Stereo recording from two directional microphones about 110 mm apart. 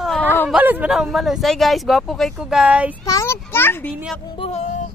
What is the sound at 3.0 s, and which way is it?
Speech, 30° left (ahead or behind).